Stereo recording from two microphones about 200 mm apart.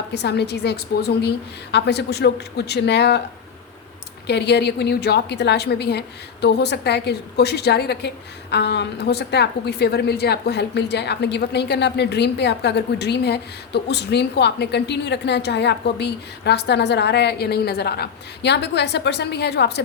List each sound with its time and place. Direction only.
0.1 s a woman's voice: 55° left (ahead or behind)
4.3 s a woman's voice: 55° left (ahead or behind)